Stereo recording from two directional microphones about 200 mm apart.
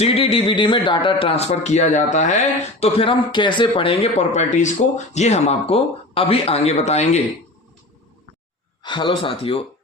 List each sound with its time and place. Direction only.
0.0 s speech: 30° left (ahead or behind)
2.8 s speech: 25° left (ahead or behind)
8.8 s speech: 25° left (ahead or behind)